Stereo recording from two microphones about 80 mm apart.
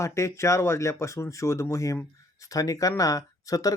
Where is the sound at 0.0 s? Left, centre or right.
Left.